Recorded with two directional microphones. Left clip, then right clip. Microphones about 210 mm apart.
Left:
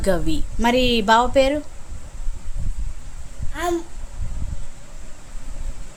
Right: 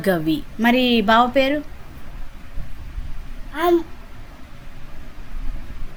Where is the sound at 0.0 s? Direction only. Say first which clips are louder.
Right 2 dB; 15° left (ahead or behind).